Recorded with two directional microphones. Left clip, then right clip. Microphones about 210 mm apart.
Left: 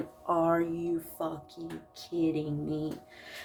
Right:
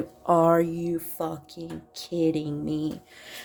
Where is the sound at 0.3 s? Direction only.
45° right (ahead or behind).